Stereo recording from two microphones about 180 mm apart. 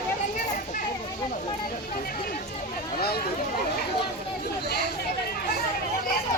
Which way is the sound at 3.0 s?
60° left (ahead or behind).